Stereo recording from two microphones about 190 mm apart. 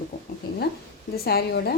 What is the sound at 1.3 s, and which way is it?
Speech, 55° left (ahead or behind).